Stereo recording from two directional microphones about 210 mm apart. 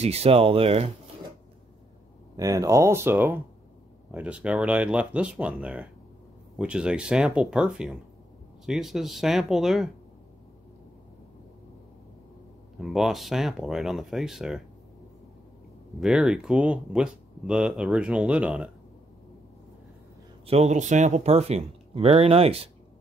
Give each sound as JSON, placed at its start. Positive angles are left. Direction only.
{"t": 0.0, "sound": "speech", "side_deg": -30}
{"t": 2.3, "sound": "speech", "side_deg": -15}
{"t": 12.8, "sound": "speech", "side_deg": 0}
{"t": 16.0, "sound": "speech", "side_deg": -5}
{"t": 20.4, "sound": "speech", "side_deg": -30}